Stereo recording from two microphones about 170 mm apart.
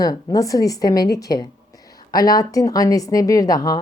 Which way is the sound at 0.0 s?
20° left (ahead or behind).